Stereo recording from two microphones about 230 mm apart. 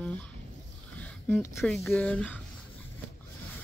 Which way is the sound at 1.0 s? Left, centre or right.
Centre.